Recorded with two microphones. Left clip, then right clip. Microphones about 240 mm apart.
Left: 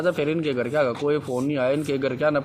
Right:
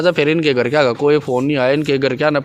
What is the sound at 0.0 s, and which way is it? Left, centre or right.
A man's voice, right.